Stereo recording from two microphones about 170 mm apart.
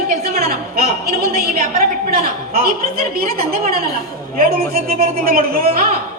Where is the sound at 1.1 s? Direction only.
55° right (ahead or behind).